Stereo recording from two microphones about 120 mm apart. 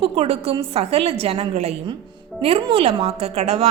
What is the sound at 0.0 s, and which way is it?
A woman's voice, 55° right (ahead or behind).